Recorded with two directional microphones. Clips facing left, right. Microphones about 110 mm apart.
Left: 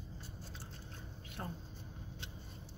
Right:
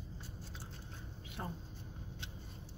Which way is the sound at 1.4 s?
10° right (ahead or behind).